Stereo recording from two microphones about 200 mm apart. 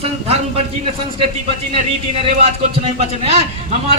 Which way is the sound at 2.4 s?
30° right (ahead or behind).